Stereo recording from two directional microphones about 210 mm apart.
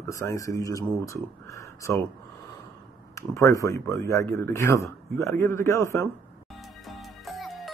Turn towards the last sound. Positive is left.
turn(degrees=0)  # may be behind; listen again after turning